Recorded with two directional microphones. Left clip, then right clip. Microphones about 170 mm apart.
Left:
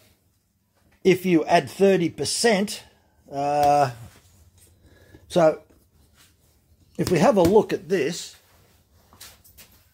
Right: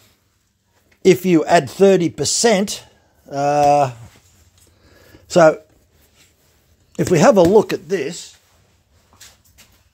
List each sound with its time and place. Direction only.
1.0 s speech: 45° right (ahead or behind)
5.1 s a sound: 40° right (ahead or behind)
6.9 s speech: 40° right (ahead or behind)